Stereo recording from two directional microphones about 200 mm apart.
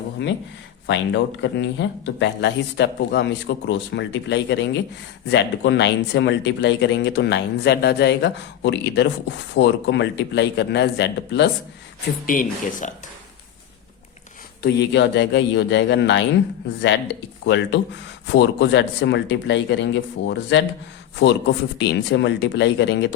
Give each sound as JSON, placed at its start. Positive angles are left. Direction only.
{"t": 0.9, "sound": "speech", "side_deg": 60}
{"t": 12.2, "sound": "speech", "side_deg": 45}
{"t": 14.6, "sound": "speech", "side_deg": 55}
{"t": 17.4, "sound": "speech", "side_deg": 60}